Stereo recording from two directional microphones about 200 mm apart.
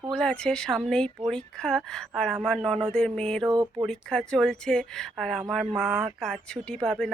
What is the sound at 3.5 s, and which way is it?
Speech, 20° right (ahead or behind).